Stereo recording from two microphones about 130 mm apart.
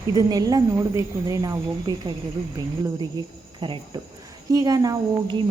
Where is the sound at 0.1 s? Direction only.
25° right (ahead or behind).